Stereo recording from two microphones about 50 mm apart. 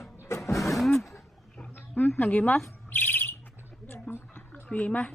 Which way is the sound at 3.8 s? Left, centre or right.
Left.